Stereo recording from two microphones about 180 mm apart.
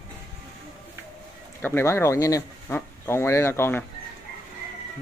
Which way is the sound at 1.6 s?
10° left (ahead or behind).